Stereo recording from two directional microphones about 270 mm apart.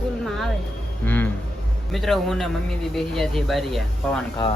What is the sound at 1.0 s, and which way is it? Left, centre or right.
Speech, centre.